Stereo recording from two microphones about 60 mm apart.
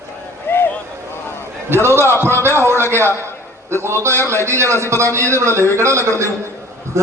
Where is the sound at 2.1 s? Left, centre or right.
Left.